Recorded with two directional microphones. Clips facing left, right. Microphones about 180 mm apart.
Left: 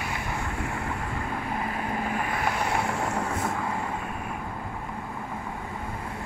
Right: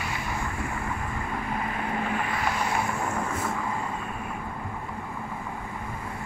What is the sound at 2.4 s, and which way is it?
Vehicle, 70° left (ahead or behind).